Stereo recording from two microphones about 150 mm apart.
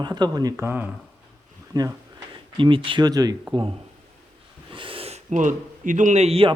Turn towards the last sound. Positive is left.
turn(degrees=-40)  # may be behind; listen again after turning